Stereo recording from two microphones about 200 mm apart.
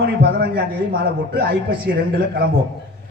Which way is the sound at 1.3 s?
55° right (ahead or behind).